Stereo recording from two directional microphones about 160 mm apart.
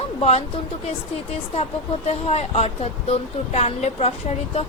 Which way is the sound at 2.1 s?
40° left (ahead or behind).